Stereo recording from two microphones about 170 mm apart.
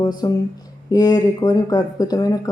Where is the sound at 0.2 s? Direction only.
20° left (ahead or behind).